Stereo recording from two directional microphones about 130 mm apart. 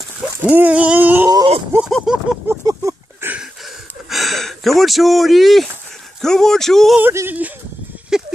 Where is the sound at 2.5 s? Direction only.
20° right (ahead or behind).